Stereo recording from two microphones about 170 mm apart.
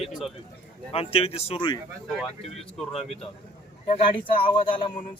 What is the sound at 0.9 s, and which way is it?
Speech, 35° left (ahead or behind).